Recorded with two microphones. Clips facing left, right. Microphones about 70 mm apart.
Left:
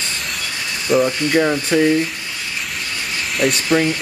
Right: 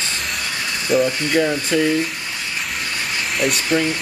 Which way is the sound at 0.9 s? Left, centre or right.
Centre.